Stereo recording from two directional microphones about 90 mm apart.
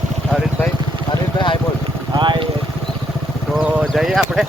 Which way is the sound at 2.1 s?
60° right (ahead or behind).